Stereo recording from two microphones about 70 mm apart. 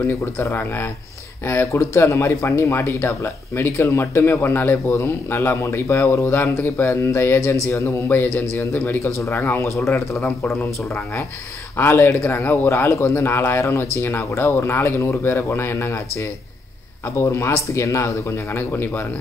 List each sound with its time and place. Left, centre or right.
0.0 s speech: left
8.1 s a man's voice: left
11.7 s speech: left